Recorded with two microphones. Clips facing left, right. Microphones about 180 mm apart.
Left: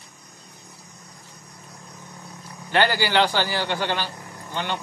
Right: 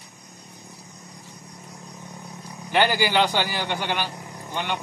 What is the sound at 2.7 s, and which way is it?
A man's voice, 15° right (ahead or behind).